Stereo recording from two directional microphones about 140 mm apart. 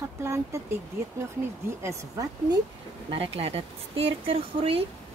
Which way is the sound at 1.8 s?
20° right (ahead or behind).